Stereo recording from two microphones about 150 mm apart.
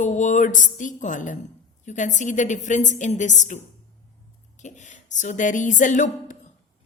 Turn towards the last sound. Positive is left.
turn(degrees=55)  # may be behind; listen again after turning